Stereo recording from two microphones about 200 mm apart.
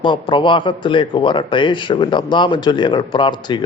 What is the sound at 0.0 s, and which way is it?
Speech, 25° left (ahead or behind).